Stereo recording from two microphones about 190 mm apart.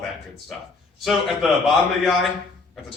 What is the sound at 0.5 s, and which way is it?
Speech, centre (ahead or behind).